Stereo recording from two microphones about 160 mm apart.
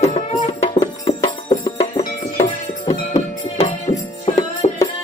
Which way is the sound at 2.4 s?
40° left (ahead or behind).